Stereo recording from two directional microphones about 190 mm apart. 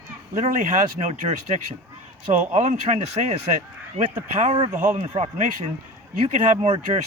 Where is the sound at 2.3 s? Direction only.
40° right (ahead or behind).